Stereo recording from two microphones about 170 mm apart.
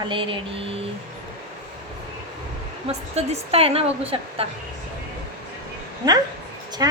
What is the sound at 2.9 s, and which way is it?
A woman's voice, 35° right (ahead or behind).